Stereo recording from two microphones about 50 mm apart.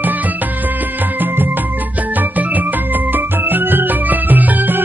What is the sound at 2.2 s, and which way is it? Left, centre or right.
Music, right.